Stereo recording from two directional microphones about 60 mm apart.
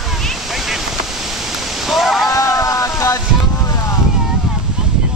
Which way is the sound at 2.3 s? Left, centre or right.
Left.